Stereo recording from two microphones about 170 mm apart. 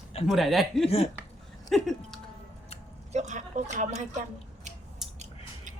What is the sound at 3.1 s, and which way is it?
Speech, 45° right (ahead or behind).